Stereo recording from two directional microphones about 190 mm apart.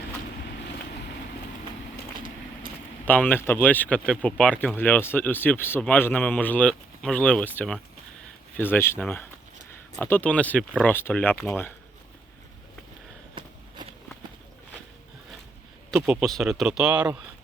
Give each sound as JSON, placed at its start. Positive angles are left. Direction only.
{"t": 3.1, "sound": "speech", "side_deg": 10}
{"t": 13.4, "sound": "a sound", "side_deg": -25}
{"t": 15.9, "sound": "speech", "side_deg": -5}